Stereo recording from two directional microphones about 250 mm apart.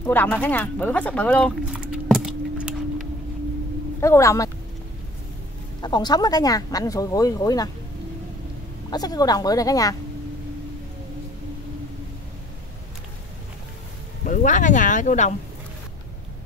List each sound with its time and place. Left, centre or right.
0.0 s speech: centre
4.0 s speech: centre
5.8 s speech: centre
8.9 s speech: centre
14.2 s speech: left